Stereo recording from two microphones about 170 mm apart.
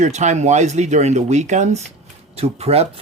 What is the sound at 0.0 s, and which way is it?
Speech, 45° right (ahead or behind).